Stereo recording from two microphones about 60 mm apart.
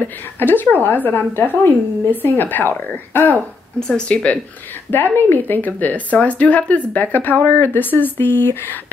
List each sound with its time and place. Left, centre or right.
0.4 s speech: left
3.8 s speech: centre
4.9 s speech: left